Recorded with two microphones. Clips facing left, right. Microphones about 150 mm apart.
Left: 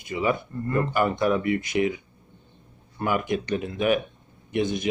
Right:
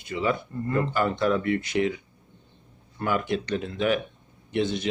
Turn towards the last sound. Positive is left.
turn(degrees=15)  # may be behind; listen again after turning